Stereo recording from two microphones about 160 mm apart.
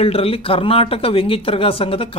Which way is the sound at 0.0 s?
35° left (ahead or behind).